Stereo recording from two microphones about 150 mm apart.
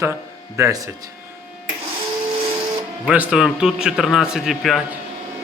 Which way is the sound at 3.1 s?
10° right (ahead or behind).